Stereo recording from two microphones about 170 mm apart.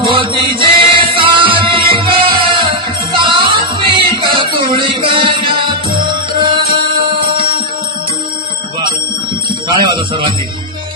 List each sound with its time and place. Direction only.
0.0 s music: 30° right (ahead or behind)